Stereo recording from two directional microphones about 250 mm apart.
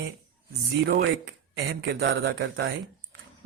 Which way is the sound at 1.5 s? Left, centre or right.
Right.